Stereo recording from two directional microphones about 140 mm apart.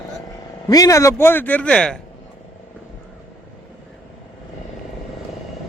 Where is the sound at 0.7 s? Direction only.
25° left (ahead or behind); by 2.0 s 5° left (ahead or behind).